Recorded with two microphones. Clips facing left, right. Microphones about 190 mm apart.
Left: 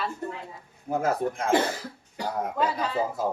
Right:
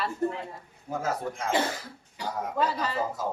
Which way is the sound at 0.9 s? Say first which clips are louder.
Left 5 dB; 55° left (ahead or behind).